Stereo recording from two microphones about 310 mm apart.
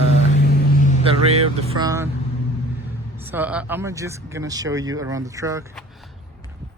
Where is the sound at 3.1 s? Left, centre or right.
Centre.